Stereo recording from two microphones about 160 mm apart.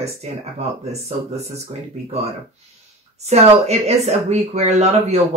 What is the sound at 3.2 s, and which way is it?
Speech, 45° right (ahead or behind).